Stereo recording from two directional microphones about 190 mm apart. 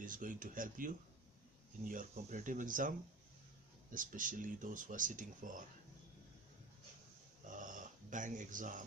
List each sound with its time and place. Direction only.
0.0 s speech: 45° right (ahead or behind)
3.9 s speech: 45° right (ahead or behind)
7.4 s a sound: 45° right (ahead or behind)